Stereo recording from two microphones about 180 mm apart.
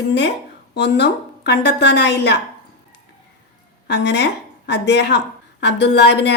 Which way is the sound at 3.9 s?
70° left (ahead or behind).